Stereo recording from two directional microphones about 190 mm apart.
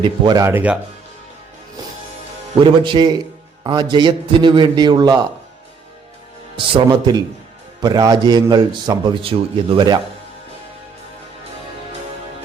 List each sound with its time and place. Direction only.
0.0 s speech: 20° right (ahead or behind)
2.6 s a man's voice: 25° right (ahead or behind)
6.6 s a man's voice: 25° right (ahead or behind)